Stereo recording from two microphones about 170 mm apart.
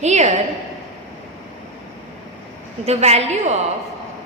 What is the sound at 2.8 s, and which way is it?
Speech, 40° right (ahead or behind).